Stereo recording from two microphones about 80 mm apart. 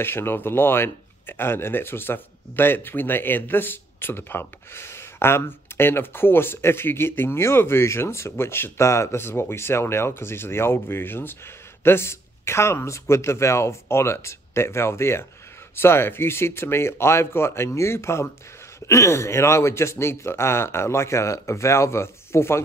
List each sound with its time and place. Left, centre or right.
0.0 s a man's voice: left